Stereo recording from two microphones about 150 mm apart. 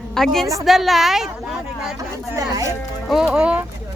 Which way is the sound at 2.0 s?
25° right (ahead or behind).